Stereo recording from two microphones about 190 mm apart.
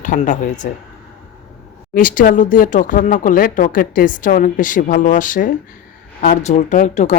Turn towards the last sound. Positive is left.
turn(degrees=40)  # may be behind; listen again after turning